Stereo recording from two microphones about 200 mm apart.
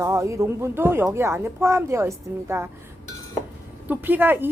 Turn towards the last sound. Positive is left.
turn(degrees=-10)  # may be behind; listen again after turning